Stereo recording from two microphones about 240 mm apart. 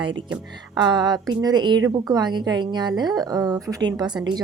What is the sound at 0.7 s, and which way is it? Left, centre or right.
A woman's voice, centre.